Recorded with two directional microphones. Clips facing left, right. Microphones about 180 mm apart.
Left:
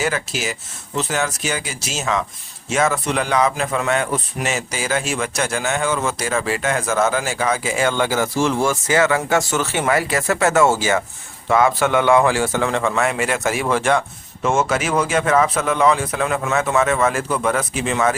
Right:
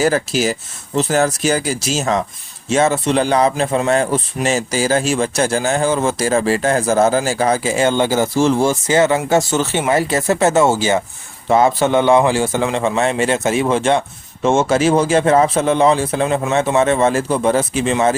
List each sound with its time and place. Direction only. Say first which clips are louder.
0.0 s a man's voice: right 7 dB; 35° right (ahead or behind)